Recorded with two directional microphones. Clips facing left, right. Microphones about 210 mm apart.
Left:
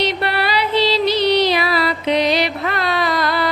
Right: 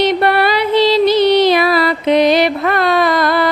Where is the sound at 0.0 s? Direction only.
50° right (ahead or behind).